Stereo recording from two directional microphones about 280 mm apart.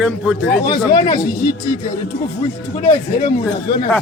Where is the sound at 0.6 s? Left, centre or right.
Centre.